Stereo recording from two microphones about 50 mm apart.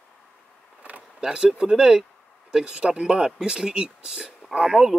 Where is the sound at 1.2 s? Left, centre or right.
Centre.